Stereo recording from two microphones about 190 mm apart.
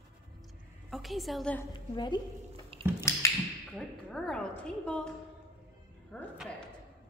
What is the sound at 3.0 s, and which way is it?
Tap, 15° left (ahead or behind).